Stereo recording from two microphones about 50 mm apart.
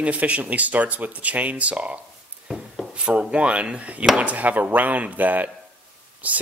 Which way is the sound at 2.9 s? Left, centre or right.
Right.